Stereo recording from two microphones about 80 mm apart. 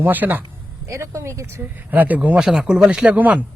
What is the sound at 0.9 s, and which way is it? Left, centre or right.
Speech, right.